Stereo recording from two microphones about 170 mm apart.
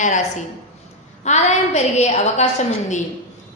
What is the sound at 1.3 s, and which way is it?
A woman's voice, 40° left (ahead or behind).